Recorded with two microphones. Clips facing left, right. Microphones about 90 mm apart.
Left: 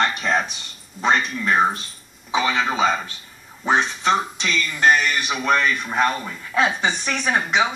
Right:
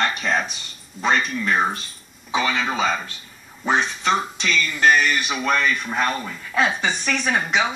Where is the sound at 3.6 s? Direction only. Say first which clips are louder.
Left 1 dB; 20° left (ahead or behind).